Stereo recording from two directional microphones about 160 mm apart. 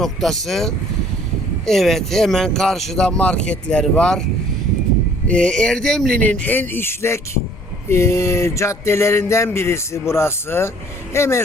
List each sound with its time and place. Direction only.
0.0 s speech: centre (ahead or behind)
5.3 s a sound: 5° left (ahead or behind)
11.1 s speech: 15° left (ahead or behind)